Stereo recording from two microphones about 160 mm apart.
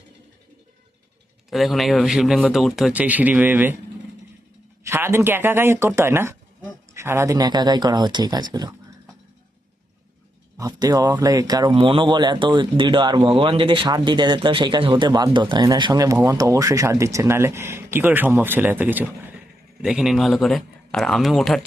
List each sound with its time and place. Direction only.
1.5 s a man's voice: centre (ahead or behind)
4.8 s speech: 15° right (ahead or behind)
10.6 s a man's voice: 25° right (ahead or behind); by 21.6 s centre (ahead or behind)